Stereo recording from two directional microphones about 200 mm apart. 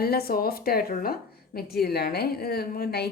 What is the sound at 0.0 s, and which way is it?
A woman's voice, 50° left (ahead or behind).